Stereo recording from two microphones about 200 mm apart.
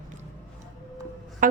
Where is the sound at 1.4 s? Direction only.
40° right (ahead or behind).